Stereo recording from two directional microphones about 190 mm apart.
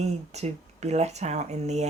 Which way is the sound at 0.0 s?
35° right (ahead or behind).